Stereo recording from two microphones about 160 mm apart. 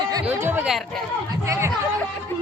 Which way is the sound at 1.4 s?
15° right (ahead or behind).